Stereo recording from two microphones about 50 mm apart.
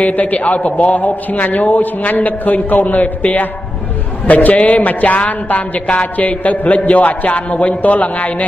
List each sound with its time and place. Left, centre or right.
0.0 s speech: left